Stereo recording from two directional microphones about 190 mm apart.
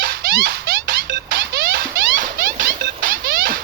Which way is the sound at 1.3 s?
50° right (ahead or behind).